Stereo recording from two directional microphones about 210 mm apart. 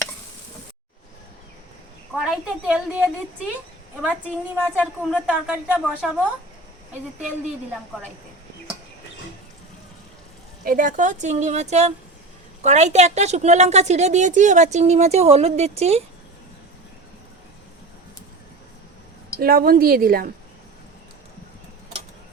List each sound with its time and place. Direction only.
2.1 s a woman's voice: 5° right (ahead or behind)
10.7 s a woman's voice: 40° right (ahead or behind)
19.4 s a woman's voice: 45° right (ahead or behind)